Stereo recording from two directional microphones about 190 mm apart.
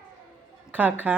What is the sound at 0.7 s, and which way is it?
Speech, 10° right (ahead or behind).